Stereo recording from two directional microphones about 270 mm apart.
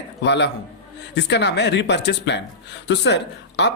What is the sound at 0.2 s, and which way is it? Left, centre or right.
Speech, left.